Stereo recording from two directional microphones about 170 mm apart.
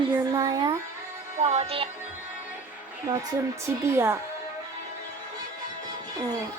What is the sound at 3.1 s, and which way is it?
Speech, 25° right (ahead or behind).